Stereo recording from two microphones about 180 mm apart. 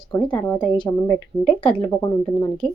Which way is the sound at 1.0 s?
5° left (ahead or behind).